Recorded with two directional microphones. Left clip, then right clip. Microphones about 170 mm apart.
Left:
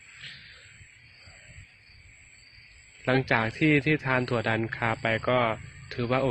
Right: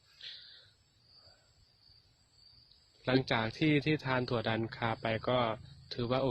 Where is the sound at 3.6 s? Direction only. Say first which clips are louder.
Left 7 dB; 45° right (ahead or behind).